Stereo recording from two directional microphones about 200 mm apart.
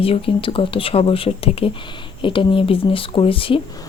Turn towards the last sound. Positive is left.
turn(degrees=25)  # may be behind; listen again after turning